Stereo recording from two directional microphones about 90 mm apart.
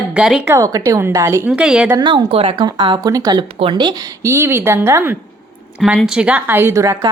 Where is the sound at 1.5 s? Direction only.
10° right (ahead or behind).